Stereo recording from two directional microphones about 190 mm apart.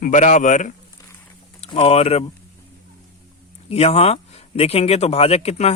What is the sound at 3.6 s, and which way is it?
Speech, 30° left (ahead or behind).